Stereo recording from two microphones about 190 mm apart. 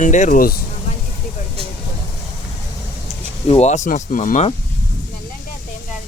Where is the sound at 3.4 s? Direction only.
35° left (ahead or behind).